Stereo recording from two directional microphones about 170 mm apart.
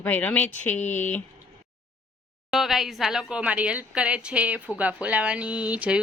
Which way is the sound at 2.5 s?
Centre (ahead or behind).